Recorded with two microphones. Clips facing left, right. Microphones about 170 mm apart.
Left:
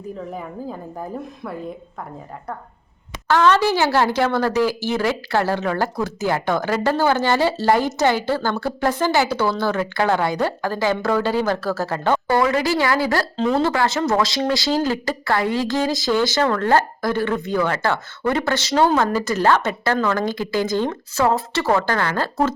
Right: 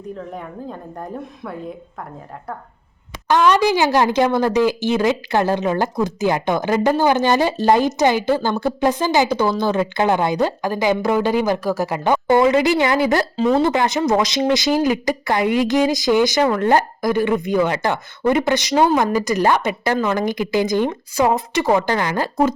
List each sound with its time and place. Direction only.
0.2 s a woman's voice: 5° left (ahead or behind)
3.2 s speech: 15° right (ahead or behind)
13.3 s a woman's voice: centre (ahead or behind)
13.6 s speech: 20° right (ahead or behind)